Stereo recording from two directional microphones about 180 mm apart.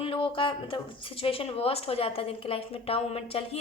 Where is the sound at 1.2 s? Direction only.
30° left (ahead or behind).